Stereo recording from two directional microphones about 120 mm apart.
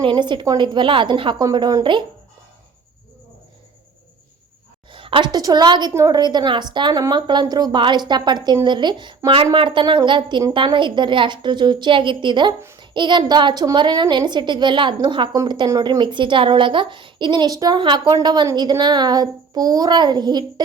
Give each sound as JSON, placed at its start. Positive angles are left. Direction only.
{"t": 0.0, "sound": "a woman's voice", "side_deg": -40}
{"t": 4.9, "sound": "a woman's voice", "side_deg": -45}
{"t": 5.9, "sound": "a woman's voice", "side_deg": -25}
{"t": 6.1, "sound": "a woman's voice", "side_deg": -35}